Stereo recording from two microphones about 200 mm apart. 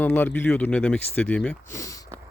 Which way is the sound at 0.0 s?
10° left (ahead or behind).